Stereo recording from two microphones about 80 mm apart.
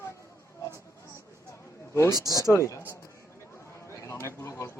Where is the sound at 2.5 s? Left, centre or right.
Left.